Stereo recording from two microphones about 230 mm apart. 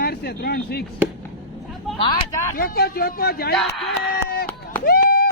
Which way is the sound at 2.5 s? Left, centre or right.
Left.